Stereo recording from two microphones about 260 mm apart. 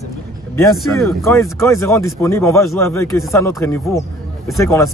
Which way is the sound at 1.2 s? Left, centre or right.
Centre.